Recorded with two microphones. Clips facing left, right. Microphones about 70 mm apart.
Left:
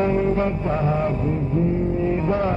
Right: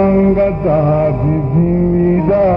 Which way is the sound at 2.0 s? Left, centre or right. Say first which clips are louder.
Right 11 dB; right.